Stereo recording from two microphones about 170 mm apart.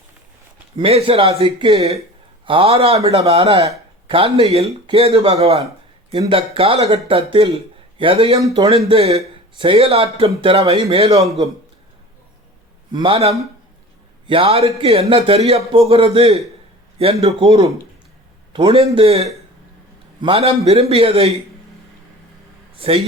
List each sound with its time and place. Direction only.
0.8 s a man's voice: 35° right (ahead or behind)
12.9 s a man's voice: 30° right (ahead or behind)
22.7 s a man's voice: 35° right (ahead or behind)